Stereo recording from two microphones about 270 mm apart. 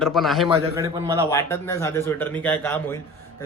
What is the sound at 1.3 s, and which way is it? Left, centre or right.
Speech, centre.